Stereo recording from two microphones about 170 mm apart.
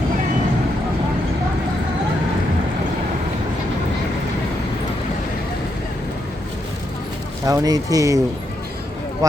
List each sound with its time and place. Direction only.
7.4 s speech: 20° right (ahead or behind)